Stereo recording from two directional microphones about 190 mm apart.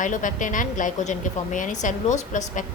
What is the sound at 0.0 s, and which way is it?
A woman's voice, 40° left (ahead or behind).